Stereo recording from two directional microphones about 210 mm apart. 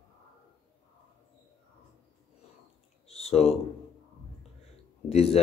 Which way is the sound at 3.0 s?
30° left (ahead or behind).